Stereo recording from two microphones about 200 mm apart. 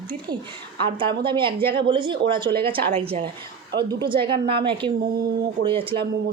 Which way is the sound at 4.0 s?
25° right (ahead or behind).